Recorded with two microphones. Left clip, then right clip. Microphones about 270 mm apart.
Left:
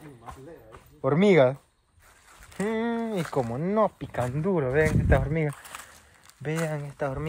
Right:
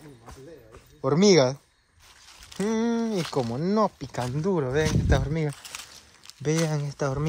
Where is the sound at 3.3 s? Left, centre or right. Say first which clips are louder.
Right 1 dB; right.